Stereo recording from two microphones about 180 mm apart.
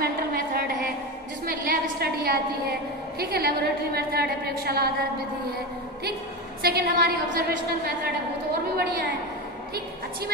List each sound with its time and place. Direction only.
0.0 s a sound: 60° right (ahead or behind)
3.2 s a woman's voice: 60° right (ahead or behind)
6.6 s a woman's voice: 60° right (ahead or behind)